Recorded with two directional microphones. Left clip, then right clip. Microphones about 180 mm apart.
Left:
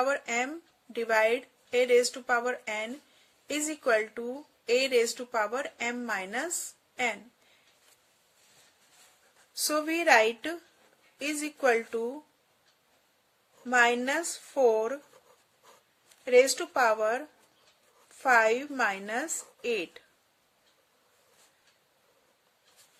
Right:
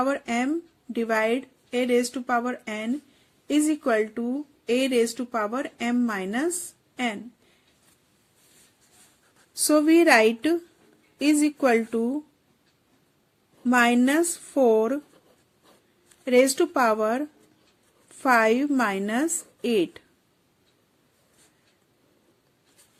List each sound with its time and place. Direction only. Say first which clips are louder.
0.0 s speech: right 3 dB; 15° right (ahead or behind)
9.6 s a woman's voice: right 10 dB; 25° right (ahead or behind)
13.7 s a woman's voice: right 4 dB; 25° right (ahead or behind)
16.2 s a woman's voice: right 3 dB; 25° right (ahead or behind)